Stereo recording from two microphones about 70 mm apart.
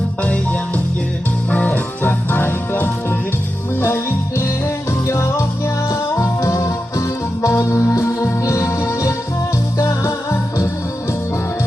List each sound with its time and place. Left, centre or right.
1.5 s music: left